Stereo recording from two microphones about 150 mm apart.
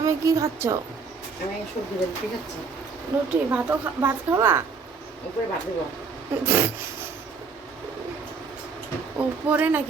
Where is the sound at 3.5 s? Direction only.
15° right (ahead or behind).